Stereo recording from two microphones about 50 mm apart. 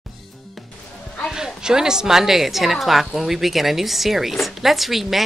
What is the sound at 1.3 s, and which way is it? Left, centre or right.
A woman's voice, centre.